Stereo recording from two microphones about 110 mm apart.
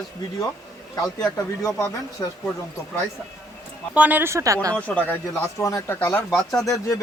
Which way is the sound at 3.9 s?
15° right (ahead or behind).